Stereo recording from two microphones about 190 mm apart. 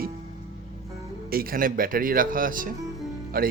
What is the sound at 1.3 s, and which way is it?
Speech, 50° right (ahead or behind).